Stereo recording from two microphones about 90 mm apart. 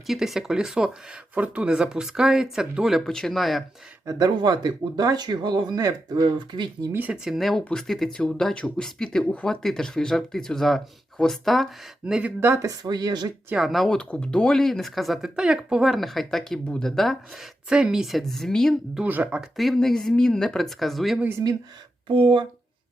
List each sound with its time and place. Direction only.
0.1 s speech: 5° right (ahead or behind)
4.0 s speech: 40° right (ahead or behind)
4.3 s speech: 55° right (ahead or behind)
6.9 s speech: 20° right (ahead or behind)
7.3 s speech: centre (ahead or behind)
12.6 s speech: 50° right (ahead or behind)
13.6 s speech: centre (ahead or behind)
19.0 s speech: 20° right (ahead or behind)
19.4 s speech: centre (ahead or behind)
22.0 s speech: 75° right (ahead or behind)